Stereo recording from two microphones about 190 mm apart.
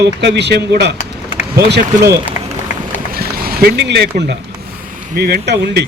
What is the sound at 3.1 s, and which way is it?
A man's voice, 50° right (ahead or behind).